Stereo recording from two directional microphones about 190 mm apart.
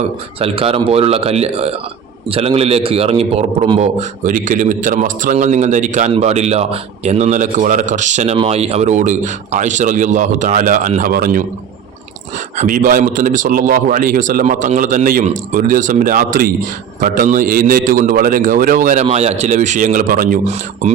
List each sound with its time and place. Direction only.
0.3 s a man's voice: 30° right (ahead or behind); by 11.4 s 50° right (ahead or behind)
12.5 s a man's voice: 45° right (ahead or behind)